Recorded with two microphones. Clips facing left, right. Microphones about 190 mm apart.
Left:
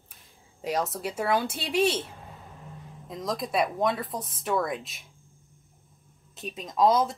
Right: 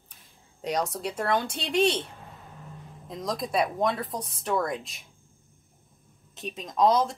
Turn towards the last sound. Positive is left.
turn(degrees=0)  # may be behind; listen again after turning